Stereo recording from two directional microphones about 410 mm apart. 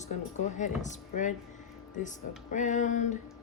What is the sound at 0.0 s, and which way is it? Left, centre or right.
Speech, centre.